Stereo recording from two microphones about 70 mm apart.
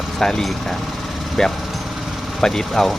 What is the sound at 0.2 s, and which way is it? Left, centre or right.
Speech, centre.